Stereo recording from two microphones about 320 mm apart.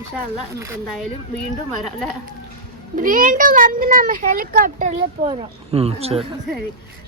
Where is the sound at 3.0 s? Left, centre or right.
Right.